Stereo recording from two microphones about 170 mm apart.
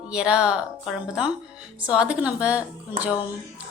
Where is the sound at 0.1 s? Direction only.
5° right (ahead or behind).